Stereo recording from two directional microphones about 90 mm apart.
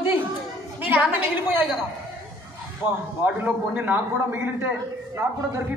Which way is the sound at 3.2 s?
15° right (ahead or behind).